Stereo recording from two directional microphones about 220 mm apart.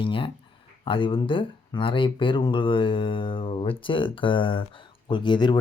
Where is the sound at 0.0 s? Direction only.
25° left (ahead or behind).